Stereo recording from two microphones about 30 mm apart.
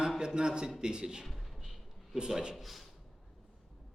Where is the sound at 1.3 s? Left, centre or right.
Centre.